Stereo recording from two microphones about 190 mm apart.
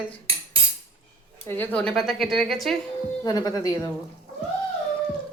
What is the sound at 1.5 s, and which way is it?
Speech, 5° left (ahead or behind).